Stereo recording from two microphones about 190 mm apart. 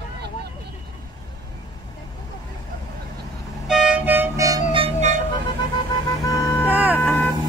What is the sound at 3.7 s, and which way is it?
Music, 5° right (ahead or behind).